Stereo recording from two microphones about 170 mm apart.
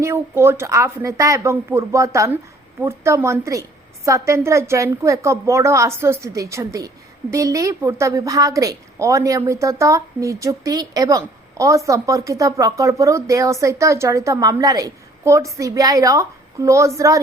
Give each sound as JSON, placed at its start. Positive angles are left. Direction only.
{"t": 0.0, "sound": "a woman's voice", "side_deg": -15}